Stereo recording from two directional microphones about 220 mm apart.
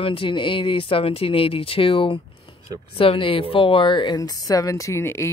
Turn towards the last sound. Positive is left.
turn(degrees=10)  # may be behind; listen again after turning